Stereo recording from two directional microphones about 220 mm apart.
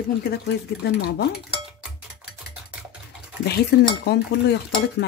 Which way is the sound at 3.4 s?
45° left (ahead or behind).